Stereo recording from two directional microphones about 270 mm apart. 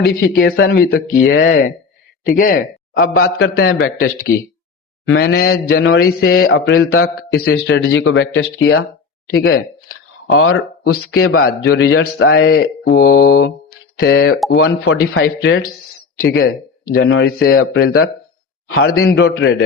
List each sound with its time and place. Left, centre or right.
0.0 s a man's voice: left
10.8 s a man's voice: left
11.3 s a man's voice: left
12.9 s a man's voice: left